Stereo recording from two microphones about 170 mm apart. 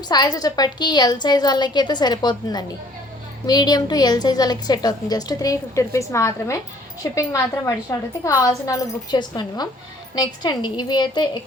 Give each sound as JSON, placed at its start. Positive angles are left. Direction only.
{"t": 0.1, "sound": "a woman's voice", "side_deg": 25}